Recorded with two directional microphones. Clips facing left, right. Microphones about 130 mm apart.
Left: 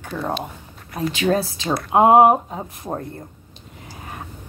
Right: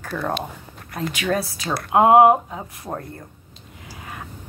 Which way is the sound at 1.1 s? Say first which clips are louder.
Left 4 dB; 25° left (ahead or behind).